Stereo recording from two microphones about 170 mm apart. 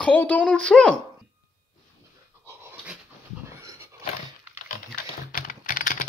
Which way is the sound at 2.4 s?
10° right (ahead or behind).